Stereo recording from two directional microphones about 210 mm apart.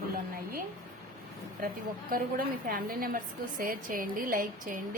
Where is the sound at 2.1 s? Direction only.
45° right (ahead or behind).